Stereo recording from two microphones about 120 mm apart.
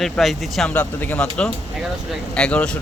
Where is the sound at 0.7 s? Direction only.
15° left (ahead or behind).